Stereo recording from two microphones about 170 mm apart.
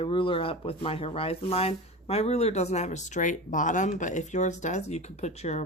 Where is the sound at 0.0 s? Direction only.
30° left (ahead or behind).